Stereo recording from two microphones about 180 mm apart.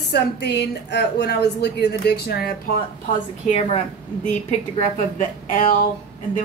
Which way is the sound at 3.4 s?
35° left (ahead or behind).